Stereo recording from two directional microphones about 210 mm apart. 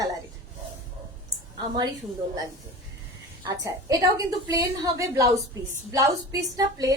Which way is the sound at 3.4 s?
15° right (ahead or behind).